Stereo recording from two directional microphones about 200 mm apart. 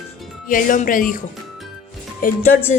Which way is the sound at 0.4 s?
40° left (ahead or behind).